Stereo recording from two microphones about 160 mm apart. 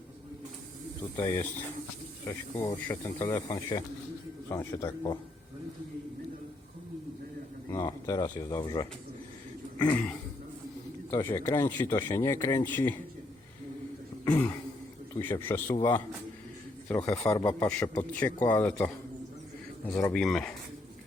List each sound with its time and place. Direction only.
1.1 s speech: 15° left (ahead or behind)
7.7 s speech: 25° left (ahead or behind)
9.7 s a sound: 10° left (ahead or behind)
11.1 s speech: 15° left (ahead or behind)
14.3 s throat clearing: 10° left (ahead or behind)
15.1 s a man's voice: 15° left (ahead or behind)
20.1 s speech: 5° left (ahead or behind)